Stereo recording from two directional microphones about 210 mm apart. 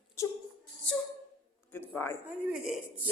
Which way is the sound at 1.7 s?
10° left (ahead or behind).